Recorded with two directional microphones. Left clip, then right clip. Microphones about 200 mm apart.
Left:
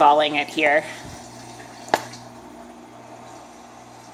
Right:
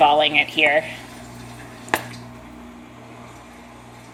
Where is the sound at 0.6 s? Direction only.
75° left (ahead or behind).